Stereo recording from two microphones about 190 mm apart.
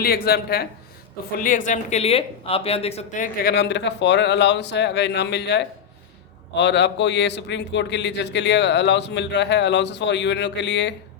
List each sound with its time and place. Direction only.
0.0 s a man's voice: 55° left (ahead or behind)
1.4 s speech: 45° left (ahead or behind)
3.5 s a man's voice: 65° left (ahead or behind)